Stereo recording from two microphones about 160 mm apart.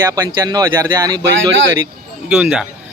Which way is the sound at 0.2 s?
20° right (ahead or behind).